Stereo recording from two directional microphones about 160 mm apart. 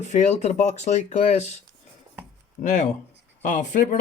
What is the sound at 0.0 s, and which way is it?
Speech, 45° left (ahead or behind).